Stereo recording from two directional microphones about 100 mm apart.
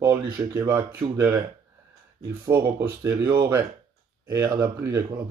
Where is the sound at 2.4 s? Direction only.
25° right (ahead or behind).